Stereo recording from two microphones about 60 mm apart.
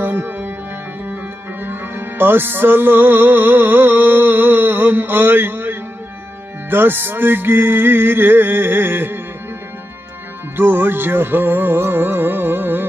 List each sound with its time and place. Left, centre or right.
0.0 s music: right
1.6 s music: right
10.5 s music: right